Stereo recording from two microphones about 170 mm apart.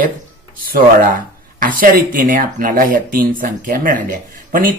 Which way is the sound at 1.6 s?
55° right (ahead or behind).